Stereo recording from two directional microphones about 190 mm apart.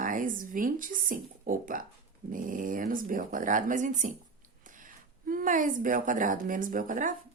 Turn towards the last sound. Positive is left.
turn(degrees=-45)  # may be behind; listen again after turning